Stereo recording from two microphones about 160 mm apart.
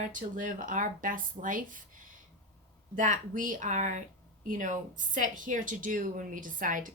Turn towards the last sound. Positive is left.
turn(degrees=-55)  # may be behind; listen again after turning